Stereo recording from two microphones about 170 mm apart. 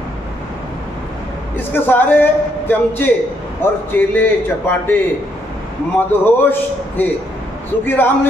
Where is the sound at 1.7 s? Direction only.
10° left (ahead or behind).